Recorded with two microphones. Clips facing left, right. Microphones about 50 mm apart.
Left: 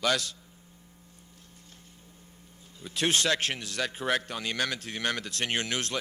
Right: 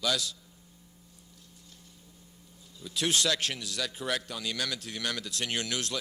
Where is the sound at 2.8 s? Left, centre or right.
Left.